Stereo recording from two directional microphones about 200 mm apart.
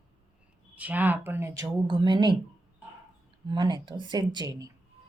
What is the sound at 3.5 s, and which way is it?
Speech, 20° right (ahead or behind).